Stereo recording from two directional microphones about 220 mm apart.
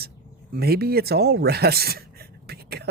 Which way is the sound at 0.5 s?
45° right (ahead or behind).